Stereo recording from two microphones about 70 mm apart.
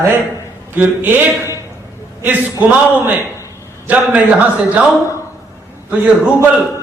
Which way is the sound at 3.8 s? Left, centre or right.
Right.